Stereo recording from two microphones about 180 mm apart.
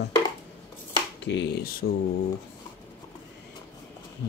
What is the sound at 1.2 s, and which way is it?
Speech, 75° left (ahead or behind).